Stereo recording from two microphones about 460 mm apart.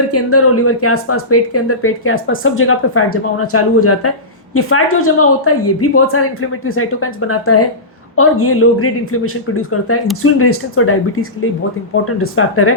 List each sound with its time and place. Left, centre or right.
0.1 s speech: left